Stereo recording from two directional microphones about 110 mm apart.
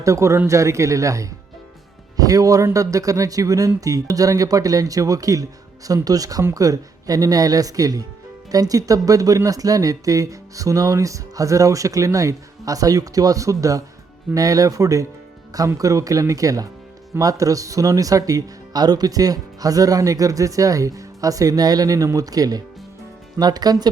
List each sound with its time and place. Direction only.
0.0 s speech: 30° right (ahead or behind)